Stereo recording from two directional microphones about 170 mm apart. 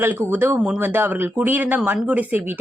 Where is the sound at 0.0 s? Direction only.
15° right (ahead or behind).